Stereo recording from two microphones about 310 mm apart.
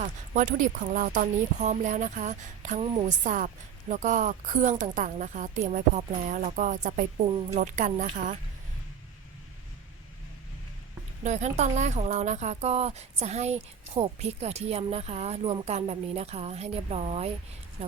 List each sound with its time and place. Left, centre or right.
0.0 s speech: right
11.2 s speech: right